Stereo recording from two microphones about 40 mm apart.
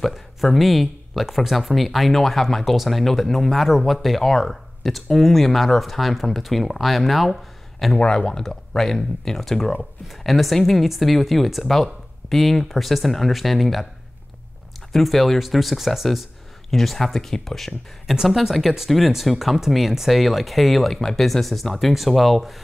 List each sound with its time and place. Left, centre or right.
0.6 s speech: centre
8.0 s speech: left
8.3 s speech: centre
14.9 s speech: centre